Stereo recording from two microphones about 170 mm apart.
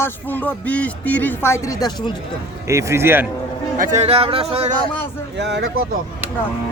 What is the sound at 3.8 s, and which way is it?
Speech, 45° right (ahead or behind).